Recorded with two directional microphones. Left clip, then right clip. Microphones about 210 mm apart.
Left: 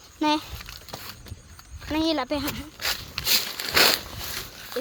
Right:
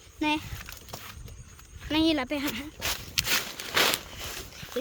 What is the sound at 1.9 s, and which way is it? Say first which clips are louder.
Speech: left 1 dB; 15° right (ahead or behind).